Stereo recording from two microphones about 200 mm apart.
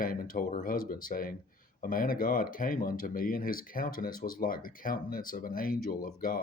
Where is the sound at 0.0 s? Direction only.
45° left (ahead or behind).